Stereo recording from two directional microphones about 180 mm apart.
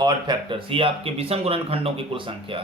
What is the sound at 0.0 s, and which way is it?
A man's voice, 25° right (ahead or behind).